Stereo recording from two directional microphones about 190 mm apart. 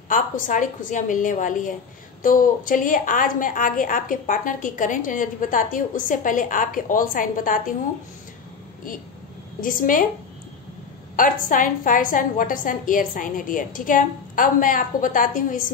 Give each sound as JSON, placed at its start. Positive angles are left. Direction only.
{"t": 0.1, "sound": "a woman's voice", "side_deg": 45}
{"t": 9.6, "sound": "a woman's voice", "side_deg": 45}
{"t": 11.1, "sound": "a woman's voice", "side_deg": 45}